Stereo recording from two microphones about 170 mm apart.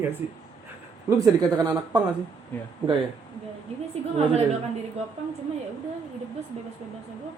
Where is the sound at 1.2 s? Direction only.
20° right (ahead or behind).